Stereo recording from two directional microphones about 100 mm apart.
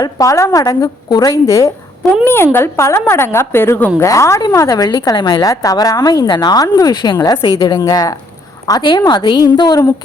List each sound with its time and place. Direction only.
0.0 s a woman's voice: 35° left (ahead or behind)
2.2 s a woman's voice: 25° left (ahead or behind)
4.0 s a woman's voice: 30° left (ahead or behind)